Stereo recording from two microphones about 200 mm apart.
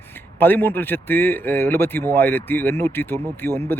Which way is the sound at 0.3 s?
10° left (ahead or behind).